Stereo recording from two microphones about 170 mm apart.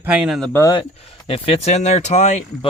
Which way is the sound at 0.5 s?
20° left (ahead or behind).